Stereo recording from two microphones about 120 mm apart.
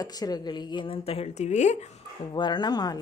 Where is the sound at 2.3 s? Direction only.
35° left (ahead or behind).